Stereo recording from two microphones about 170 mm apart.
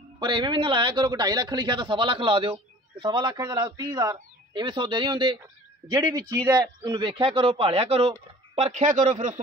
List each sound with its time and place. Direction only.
0.2 s a man's voice: 30° right (ahead or behind); by 9.4 s 50° right (ahead or behind)